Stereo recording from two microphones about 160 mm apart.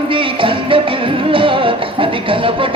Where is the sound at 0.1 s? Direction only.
35° right (ahead or behind).